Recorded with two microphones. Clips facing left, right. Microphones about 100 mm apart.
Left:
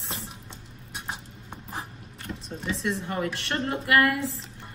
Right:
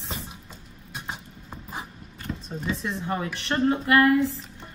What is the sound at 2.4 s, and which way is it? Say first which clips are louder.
Speech: left 1 dB; 30° right (ahead or behind).